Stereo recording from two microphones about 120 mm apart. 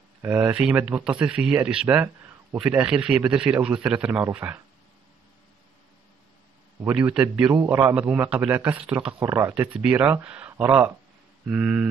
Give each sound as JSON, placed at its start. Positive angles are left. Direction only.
{"t": 0.2, "sound": "a man's voice", "side_deg": -20}
{"t": 6.8, "sound": "a man's voice", "side_deg": -15}
{"t": 9.2, "sound": "a man's voice", "side_deg": -20}